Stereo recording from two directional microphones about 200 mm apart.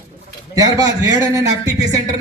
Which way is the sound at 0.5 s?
20° right (ahead or behind).